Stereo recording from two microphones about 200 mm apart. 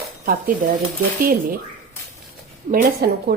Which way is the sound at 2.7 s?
45° right (ahead or behind).